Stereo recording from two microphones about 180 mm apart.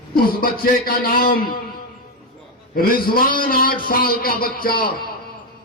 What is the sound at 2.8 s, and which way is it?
A man's voice, 55° left (ahead or behind).